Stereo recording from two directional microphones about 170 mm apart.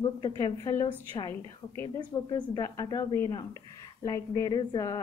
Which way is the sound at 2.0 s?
25° left (ahead or behind).